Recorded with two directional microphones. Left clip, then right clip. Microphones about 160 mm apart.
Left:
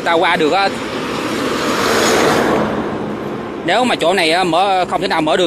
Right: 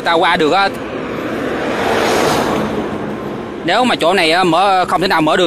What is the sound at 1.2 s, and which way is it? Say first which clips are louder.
Vehicle: left 1 dB; 40° left (ahead or behind).